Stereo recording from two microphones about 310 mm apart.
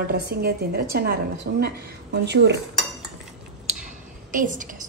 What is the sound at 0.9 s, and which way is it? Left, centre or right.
Speech, right.